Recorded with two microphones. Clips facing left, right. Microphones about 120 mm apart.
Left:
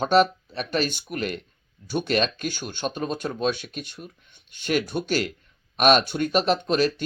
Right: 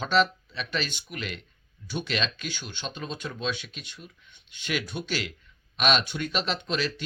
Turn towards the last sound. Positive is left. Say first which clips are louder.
# left 8 dB
turn(degrees=45)  # may be behind; listen again after turning